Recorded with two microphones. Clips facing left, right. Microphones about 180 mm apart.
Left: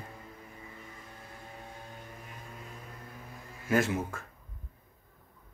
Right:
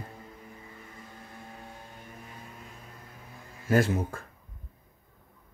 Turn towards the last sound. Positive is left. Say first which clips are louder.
# right 3 dB
turn(degrees=-35)  # may be behind; listen again after turning